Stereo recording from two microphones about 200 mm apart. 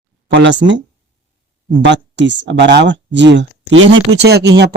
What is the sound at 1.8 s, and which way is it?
Speech, 60° right (ahead or behind).